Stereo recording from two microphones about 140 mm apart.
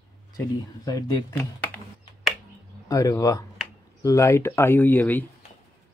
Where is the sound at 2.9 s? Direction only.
25° left (ahead or behind).